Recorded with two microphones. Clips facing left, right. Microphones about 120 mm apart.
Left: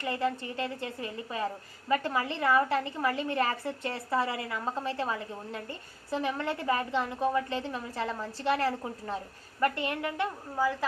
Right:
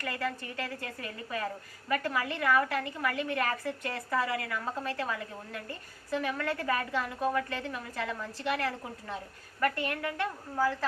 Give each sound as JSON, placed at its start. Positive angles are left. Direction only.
{"t": 0.0, "sound": "a woman's voice", "side_deg": 25}